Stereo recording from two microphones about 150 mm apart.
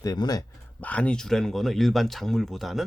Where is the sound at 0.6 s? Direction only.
10° left (ahead or behind).